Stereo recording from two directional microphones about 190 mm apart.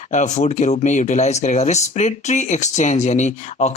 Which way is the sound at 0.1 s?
40° left (ahead or behind).